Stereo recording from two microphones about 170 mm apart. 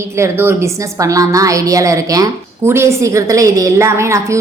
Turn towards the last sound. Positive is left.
turn(degrees=-15)  # may be behind; listen again after turning